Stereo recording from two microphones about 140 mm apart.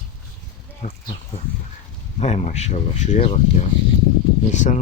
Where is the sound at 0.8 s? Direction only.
65° left (ahead or behind).